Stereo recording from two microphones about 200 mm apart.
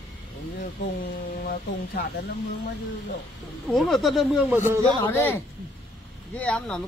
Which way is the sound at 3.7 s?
Centre (ahead or behind).